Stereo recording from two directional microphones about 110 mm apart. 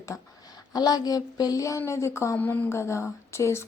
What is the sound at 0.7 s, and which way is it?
Speech, 35° left (ahead or behind).